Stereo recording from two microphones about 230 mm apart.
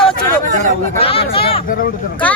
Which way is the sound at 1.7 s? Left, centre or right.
Left.